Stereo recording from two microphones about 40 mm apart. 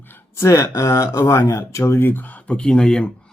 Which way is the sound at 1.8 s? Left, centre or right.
Left.